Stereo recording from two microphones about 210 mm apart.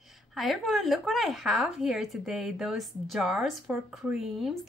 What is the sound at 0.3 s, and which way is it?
A woman's voice, centre (ahead or behind).